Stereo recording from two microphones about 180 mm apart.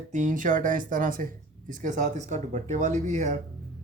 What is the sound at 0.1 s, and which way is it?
Speech, 45° right (ahead or behind).